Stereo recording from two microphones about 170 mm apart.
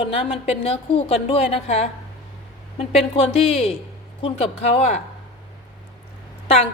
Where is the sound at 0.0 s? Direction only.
30° left (ahead or behind).